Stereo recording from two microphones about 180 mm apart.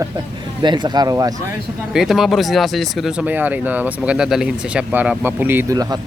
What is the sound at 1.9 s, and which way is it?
Speech, centre (ahead or behind).